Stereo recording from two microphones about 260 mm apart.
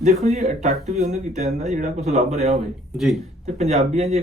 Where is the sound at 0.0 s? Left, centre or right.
Right.